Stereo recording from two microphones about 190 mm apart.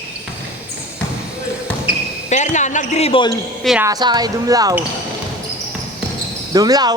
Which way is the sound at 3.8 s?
20° right (ahead or behind).